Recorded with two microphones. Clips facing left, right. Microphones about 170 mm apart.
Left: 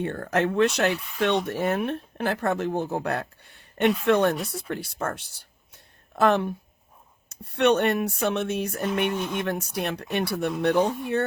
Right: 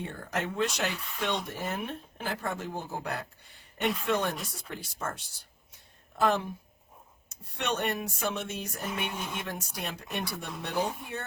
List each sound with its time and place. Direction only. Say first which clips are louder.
0.0 s speech: left 9 dB; 65° left (ahead or behind)
7.5 s speech: left 11 dB; 65° left (ahead or behind)
9.1 s speech: left 8 dB; 5° right (ahead or behind)
9.4 s speech: left 9 dB; 65° left (ahead or behind)